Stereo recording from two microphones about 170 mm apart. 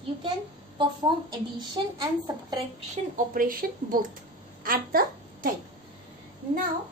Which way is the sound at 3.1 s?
55° right (ahead or behind).